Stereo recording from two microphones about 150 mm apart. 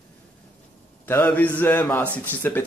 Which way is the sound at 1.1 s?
10° left (ahead or behind).